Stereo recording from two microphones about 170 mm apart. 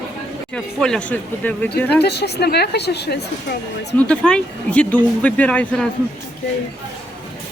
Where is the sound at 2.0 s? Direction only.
75° left (ahead or behind).